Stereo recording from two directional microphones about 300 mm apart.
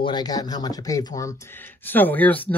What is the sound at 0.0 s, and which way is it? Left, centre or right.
Speech, centre.